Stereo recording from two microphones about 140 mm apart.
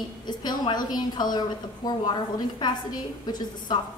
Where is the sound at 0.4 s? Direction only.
30° left (ahead or behind).